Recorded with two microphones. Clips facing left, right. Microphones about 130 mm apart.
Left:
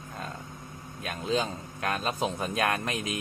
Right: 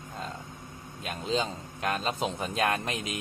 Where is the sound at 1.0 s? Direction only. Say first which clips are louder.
Left 1 dB; 25° right (ahead or behind).